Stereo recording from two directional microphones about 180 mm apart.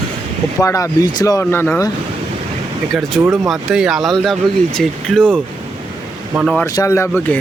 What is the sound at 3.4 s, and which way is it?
Speech, centre (ahead or behind).